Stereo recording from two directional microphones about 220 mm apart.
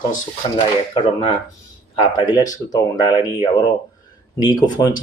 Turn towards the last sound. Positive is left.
turn(degrees=20)  # may be behind; listen again after turning